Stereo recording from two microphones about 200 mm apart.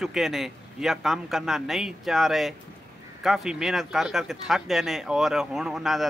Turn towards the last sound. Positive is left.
turn(degrees=0)  # may be behind; listen again after turning